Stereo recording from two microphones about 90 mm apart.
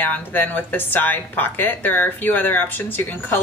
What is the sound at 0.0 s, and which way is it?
A woman's voice, 20° left (ahead or behind).